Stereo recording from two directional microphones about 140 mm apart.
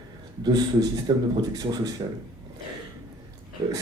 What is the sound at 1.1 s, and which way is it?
Speech, 30° right (ahead or behind).